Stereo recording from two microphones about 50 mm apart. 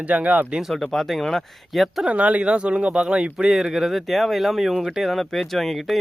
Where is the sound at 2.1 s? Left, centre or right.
Right.